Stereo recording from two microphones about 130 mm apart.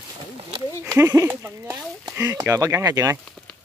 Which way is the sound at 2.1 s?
20° right (ahead or behind).